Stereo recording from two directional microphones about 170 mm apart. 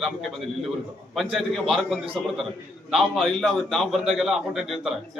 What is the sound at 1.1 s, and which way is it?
A man's voice, centre (ahead or behind).